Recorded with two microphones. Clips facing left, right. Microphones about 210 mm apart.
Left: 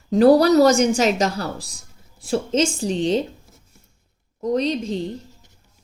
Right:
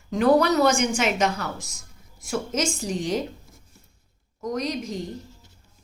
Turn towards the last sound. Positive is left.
turn(degrees=30)  # may be behind; listen again after turning